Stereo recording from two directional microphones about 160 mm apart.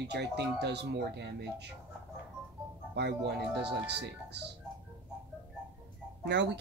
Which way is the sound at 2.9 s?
90° right.